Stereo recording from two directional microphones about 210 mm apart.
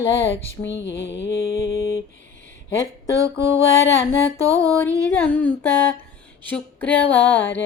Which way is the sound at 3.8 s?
60° left (ahead or behind).